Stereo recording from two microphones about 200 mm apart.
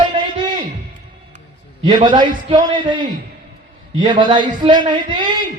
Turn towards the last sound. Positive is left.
turn(degrees=-25)  # may be behind; listen again after turning